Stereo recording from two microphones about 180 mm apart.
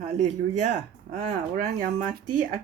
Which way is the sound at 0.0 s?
40° right (ahead or behind).